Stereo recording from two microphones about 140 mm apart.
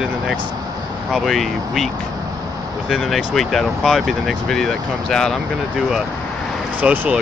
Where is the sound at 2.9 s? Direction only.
Centre (ahead or behind).